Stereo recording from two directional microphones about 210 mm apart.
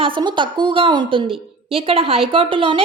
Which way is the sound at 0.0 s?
20° right (ahead or behind).